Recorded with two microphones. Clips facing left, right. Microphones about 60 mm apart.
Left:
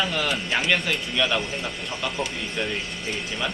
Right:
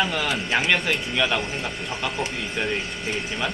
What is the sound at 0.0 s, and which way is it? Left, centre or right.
Speech, centre.